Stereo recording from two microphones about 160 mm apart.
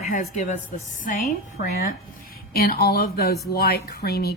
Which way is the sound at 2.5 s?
70° left (ahead or behind).